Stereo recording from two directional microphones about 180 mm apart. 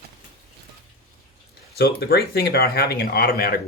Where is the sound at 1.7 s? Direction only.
60° left (ahead or behind).